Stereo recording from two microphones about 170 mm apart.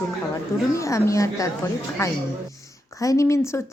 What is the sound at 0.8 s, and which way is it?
A woman's voice, 20° left (ahead or behind).